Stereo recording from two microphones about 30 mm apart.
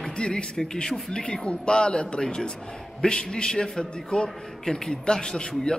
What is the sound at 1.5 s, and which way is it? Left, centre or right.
A man's voice, left.